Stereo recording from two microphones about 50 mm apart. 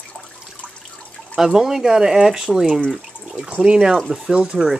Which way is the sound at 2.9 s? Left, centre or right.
Centre.